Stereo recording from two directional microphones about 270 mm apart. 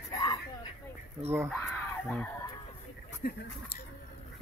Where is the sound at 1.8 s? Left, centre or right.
Centre.